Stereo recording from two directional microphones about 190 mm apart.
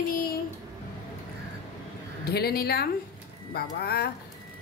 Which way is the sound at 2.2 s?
55° left (ahead or behind).